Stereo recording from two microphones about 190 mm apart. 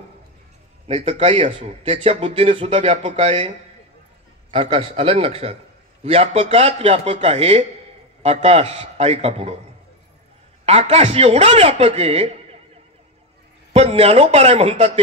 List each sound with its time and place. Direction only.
0.8 s speech: 30° right (ahead or behind)
10.6 s speech: 35° right (ahead or behind)
13.7 s speech: 30° right (ahead or behind)